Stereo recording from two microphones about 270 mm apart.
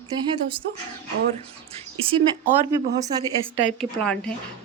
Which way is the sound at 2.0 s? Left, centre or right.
Right.